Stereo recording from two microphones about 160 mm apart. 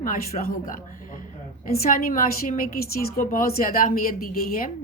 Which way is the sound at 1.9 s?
60° left (ahead or behind).